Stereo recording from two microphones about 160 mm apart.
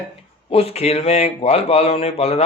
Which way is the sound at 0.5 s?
40° left (ahead or behind).